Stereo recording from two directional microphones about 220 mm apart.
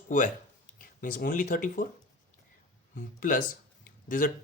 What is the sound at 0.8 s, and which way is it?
Speech, 40° left (ahead or behind).